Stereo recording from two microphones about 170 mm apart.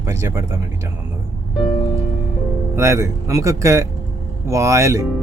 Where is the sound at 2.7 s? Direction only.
15° right (ahead or behind).